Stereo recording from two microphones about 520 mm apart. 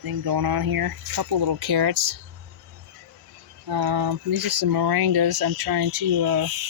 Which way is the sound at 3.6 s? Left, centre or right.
Right.